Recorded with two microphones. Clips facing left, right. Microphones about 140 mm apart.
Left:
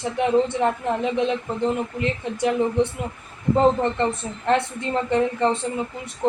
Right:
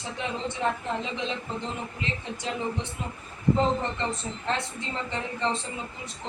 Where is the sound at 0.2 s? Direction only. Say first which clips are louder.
Left 11 dB; 60° left (ahead or behind).